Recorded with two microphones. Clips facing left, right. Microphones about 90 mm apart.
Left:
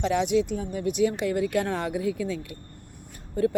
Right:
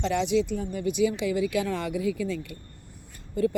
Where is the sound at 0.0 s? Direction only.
55° left (ahead or behind).